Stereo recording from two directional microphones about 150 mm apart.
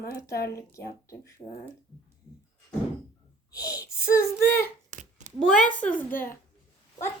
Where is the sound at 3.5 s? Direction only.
25° left (ahead or behind).